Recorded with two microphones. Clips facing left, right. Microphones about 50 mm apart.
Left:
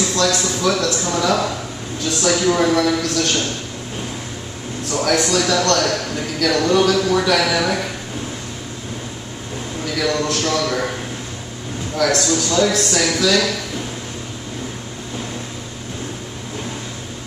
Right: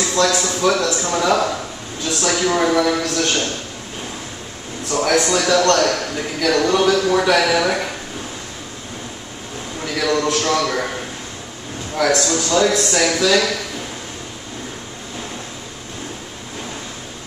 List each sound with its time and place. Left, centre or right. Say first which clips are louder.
0.0 s a sound: right 1 dB; centre
0.3 s a man's voice: right 1 dB; centre
2.0 s a man's voice: left 2 dB; centre
5.4 s a man's voice: right 2 dB; centre
9.9 s a man's voice: right 2 dB; centre
12.0 s a man's voice: even; centre